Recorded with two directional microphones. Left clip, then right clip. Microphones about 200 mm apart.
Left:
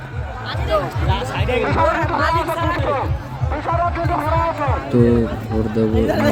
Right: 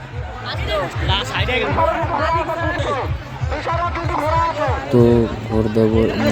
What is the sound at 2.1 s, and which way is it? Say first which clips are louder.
Chatter: left 1 dB; 10° left (ahead or behind).